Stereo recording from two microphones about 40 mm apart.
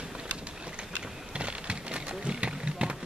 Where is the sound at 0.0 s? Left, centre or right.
Right.